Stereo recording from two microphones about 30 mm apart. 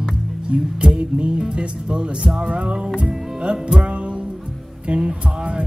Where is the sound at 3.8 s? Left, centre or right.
Right.